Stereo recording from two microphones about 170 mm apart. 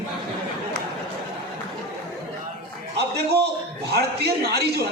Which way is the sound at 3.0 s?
70° right (ahead or behind).